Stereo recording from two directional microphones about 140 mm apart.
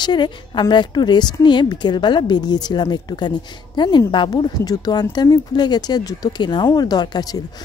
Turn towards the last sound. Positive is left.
turn(degrees=30)  # may be behind; listen again after turning